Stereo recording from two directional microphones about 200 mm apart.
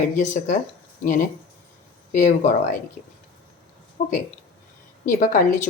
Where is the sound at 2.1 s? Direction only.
40° left (ahead or behind).